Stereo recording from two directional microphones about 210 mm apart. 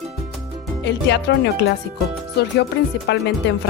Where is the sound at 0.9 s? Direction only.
55° left (ahead or behind).